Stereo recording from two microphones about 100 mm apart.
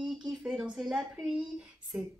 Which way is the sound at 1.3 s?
10° right (ahead or behind).